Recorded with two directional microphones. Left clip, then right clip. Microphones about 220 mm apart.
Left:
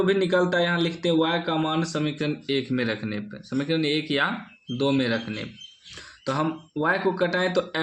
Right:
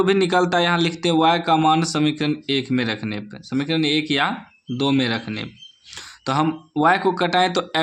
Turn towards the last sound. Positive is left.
turn(degrees=-35)  # may be behind; listen again after turning